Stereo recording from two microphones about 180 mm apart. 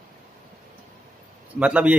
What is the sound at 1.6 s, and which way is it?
Speech, 5° right (ahead or behind).